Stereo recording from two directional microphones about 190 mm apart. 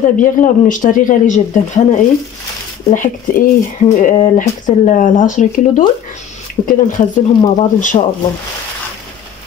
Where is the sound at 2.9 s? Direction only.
40° left (ahead or behind).